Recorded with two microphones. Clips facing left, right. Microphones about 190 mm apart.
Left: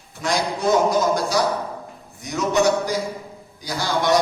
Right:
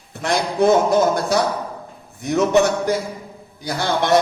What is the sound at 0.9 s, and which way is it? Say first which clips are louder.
A man's voice: right 3 dB; 55° right (ahead or behind).